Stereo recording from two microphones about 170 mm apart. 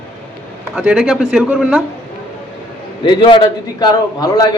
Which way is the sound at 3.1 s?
30° left (ahead or behind).